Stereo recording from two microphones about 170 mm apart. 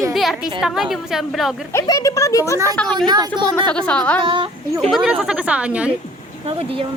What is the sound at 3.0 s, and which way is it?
Speech, 25° right (ahead or behind).